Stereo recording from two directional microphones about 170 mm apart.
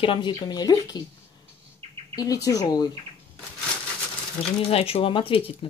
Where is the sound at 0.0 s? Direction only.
30° left (ahead or behind).